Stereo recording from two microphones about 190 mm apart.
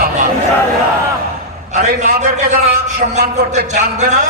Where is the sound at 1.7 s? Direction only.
40° right (ahead or behind).